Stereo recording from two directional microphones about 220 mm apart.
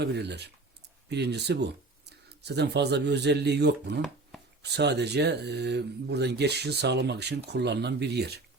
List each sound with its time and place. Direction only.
0.0 s speech: 50° right (ahead or behind)